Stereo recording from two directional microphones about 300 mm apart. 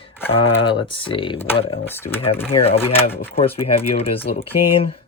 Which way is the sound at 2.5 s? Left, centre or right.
Centre.